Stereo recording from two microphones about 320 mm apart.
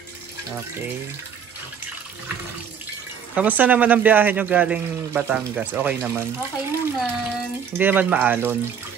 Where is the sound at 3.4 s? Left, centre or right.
Centre.